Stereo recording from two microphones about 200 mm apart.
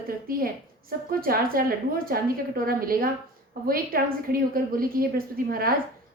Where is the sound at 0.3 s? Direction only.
45° right (ahead or behind).